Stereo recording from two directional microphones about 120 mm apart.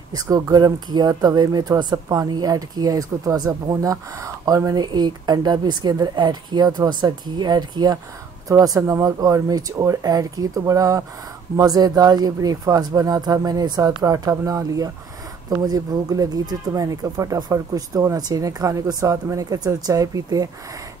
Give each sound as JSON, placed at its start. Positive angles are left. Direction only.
{"t": 0.1, "sound": "speech", "side_deg": -35}